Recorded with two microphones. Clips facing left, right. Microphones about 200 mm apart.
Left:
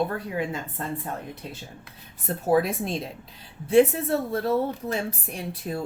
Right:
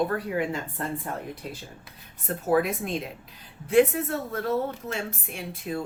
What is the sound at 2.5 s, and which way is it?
Speech, 30° left (ahead or behind).